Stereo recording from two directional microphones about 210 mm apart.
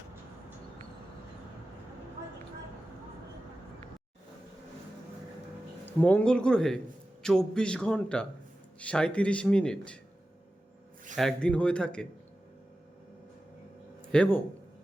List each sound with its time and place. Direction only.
5.8 s speech: 5° left (ahead or behind)
11.1 s speech: centre (ahead or behind)
14.1 s speech: 5° left (ahead or behind)